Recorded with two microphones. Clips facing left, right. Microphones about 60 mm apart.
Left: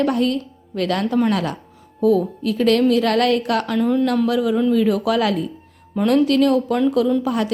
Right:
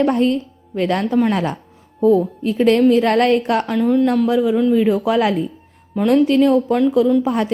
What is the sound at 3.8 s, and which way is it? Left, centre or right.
Speech, centre.